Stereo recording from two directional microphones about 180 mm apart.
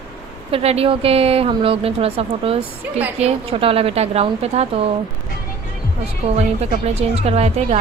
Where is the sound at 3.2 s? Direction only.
35° right (ahead or behind).